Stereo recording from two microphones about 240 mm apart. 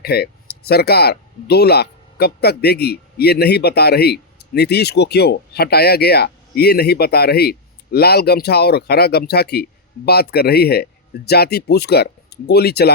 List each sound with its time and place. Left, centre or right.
0.0 s speech: left